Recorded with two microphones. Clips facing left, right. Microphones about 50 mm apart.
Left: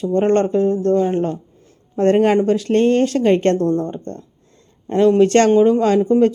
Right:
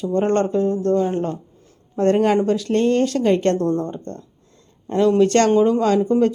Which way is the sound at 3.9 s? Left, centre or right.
Left.